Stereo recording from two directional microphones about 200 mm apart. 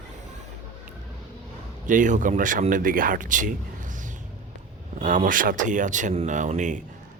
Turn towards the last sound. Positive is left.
turn(degrees=-40)  # may be behind; listen again after turning